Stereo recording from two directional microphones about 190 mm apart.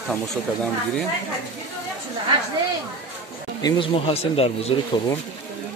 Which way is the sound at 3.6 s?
30° left (ahead or behind).